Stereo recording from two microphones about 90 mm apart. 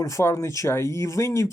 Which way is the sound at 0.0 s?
35° left (ahead or behind).